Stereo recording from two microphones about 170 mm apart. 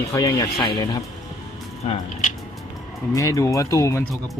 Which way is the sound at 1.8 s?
40° left (ahead or behind).